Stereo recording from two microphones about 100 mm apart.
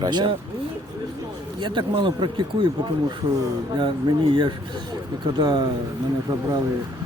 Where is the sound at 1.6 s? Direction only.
50° right (ahead or behind).